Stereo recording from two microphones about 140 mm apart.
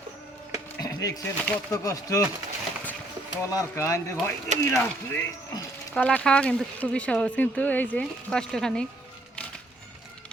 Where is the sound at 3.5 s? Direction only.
25° left (ahead or behind); by 8.9 s 5° left (ahead or behind).